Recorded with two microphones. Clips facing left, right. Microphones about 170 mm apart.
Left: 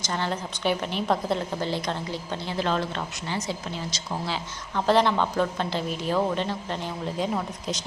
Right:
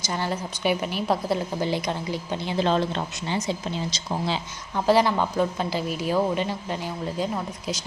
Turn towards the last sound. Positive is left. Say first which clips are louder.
# right 1 dB
turn(degrees=-10)  # may be behind; listen again after turning